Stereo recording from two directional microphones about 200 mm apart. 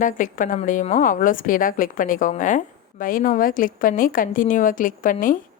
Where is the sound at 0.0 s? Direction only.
40° left (ahead or behind).